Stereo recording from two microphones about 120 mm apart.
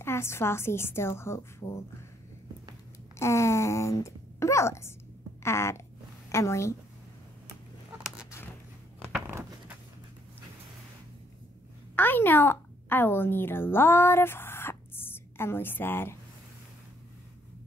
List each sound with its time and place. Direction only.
0.0 s a woman's voice: 20° left (ahead or behind)
3.2 s a woman's voice: 25° left (ahead or behind)
5.4 s a sound: 20° left (ahead or behind)
6.3 s a woman's voice: 25° left (ahead or behind)
11.9 s a woman's voice: 15° left (ahead or behind)